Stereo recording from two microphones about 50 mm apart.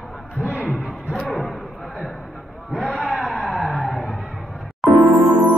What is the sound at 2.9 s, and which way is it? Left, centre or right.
Music, centre.